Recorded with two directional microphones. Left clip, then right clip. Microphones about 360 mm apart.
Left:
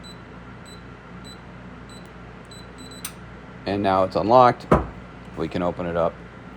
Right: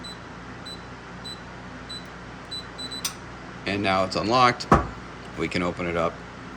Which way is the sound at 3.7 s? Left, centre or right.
Centre.